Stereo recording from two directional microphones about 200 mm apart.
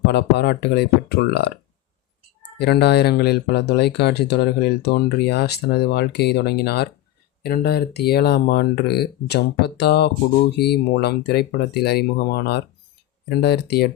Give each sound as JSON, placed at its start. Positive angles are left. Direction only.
{"t": 0.1, "sound": "speech", "side_deg": 55}
{"t": 2.6, "sound": "speech", "side_deg": 55}